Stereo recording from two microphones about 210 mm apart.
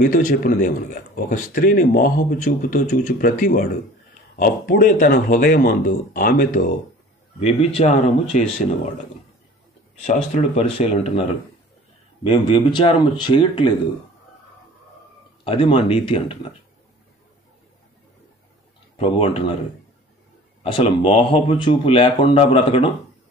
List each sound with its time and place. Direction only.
0.1 s speech: 40° left (ahead or behind)
10.0 s speech: 30° left (ahead or behind)
15.4 s speech: 25° left (ahead or behind)
18.9 s speech: 25° left (ahead or behind)
20.6 s speech: 25° left (ahead or behind)